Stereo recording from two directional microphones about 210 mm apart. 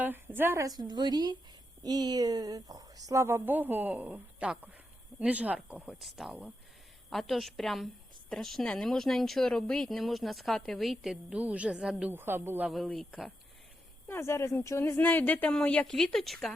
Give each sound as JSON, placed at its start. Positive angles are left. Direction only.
{"t": 0.0, "sound": "a woman's voice", "side_deg": -10}
{"t": 14.1, "sound": "speech", "side_deg": 10}